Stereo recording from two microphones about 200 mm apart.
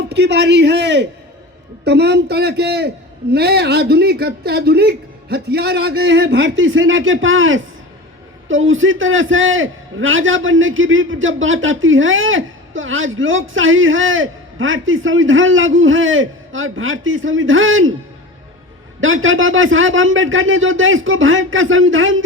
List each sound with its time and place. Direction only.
0.2 s a man's voice: 60° right (ahead or behind); by 17.9 s 80° right
18.9 s a man's voice: 75° right (ahead or behind)